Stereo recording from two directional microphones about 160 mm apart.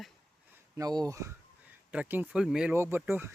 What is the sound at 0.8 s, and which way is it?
Speech, 25° right (ahead or behind).